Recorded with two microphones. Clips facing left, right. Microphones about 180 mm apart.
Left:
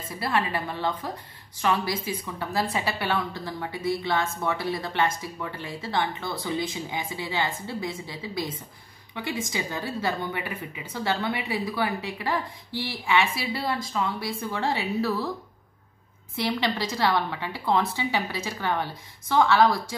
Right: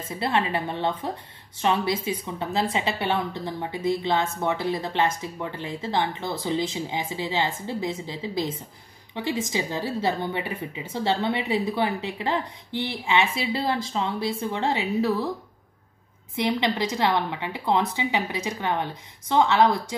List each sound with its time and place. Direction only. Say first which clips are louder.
0.1 s a woman's voice: right 2 dB; 25° right (ahead or behind)
16.3 s a woman's voice: right 3 dB; 20° right (ahead or behind)